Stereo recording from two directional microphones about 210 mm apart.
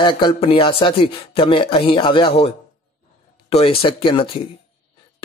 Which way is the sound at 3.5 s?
25° left (ahead or behind).